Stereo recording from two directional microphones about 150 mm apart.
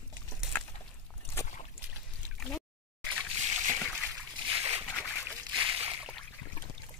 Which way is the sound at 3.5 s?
55° right (ahead or behind).